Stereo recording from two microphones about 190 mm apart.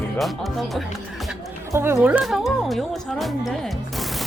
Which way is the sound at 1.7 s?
10° right (ahead or behind).